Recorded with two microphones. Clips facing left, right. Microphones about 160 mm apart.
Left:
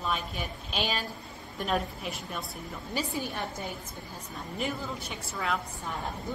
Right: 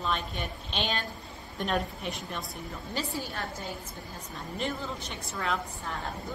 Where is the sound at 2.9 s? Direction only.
15° left (ahead or behind).